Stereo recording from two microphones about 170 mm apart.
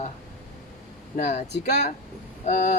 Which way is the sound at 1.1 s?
40° left (ahead or behind).